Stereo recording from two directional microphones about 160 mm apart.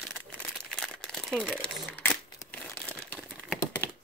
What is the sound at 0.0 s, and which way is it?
Crumpling, 5° left (ahead or behind).